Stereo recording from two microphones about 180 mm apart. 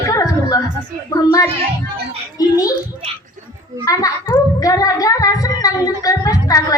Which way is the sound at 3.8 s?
20° left (ahead or behind).